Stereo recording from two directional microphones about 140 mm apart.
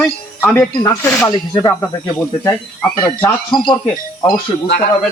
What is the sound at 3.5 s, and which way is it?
Speech, 30° left (ahead or behind).